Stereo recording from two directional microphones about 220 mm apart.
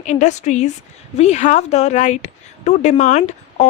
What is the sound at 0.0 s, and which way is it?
A woman's voice, 30° left (ahead or behind).